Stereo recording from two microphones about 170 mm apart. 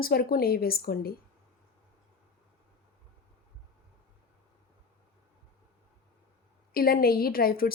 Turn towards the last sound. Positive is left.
turn(degrees=60)  # may be behind; listen again after turning